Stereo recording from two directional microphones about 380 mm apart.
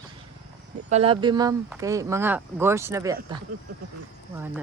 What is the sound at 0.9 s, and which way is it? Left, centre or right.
Speech, centre.